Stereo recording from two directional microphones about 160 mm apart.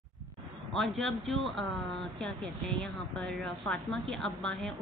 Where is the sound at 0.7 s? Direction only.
Centre (ahead or behind).